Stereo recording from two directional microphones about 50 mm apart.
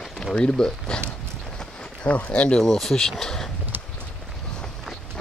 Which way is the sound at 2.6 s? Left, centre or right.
Centre.